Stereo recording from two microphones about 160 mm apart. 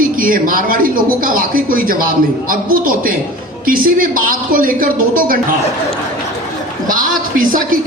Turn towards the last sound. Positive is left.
turn(degrees=-60)  # may be behind; listen again after turning